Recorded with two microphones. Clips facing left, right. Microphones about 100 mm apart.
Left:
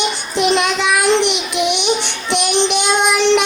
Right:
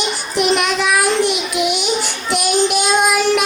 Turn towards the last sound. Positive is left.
turn(degrees=25)  # may be behind; listen again after turning